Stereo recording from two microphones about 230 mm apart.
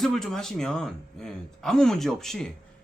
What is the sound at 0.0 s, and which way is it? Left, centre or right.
Speech, centre.